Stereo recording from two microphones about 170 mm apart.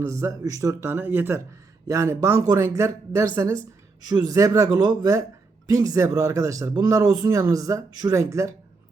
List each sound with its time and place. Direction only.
0.0 s speech: 15° right (ahead or behind)